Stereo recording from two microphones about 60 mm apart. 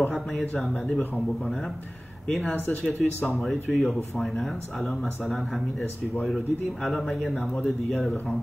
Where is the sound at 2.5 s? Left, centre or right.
Left.